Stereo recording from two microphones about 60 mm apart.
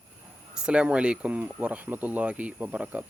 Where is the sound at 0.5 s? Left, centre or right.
Centre.